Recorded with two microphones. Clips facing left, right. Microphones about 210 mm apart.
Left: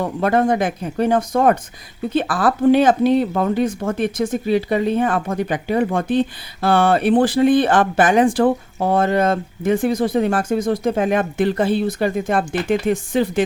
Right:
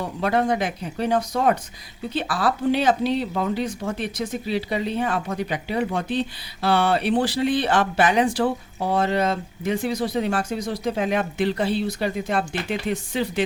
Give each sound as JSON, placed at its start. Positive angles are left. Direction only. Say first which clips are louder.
{"t": 0.0, "sound": "speech", "louder": "left 5 dB", "side_deg": 50}